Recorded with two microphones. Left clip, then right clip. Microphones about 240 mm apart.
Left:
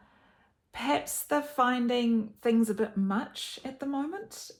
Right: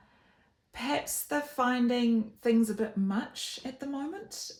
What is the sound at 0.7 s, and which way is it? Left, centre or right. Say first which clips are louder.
Speech: left 3 dB; centre.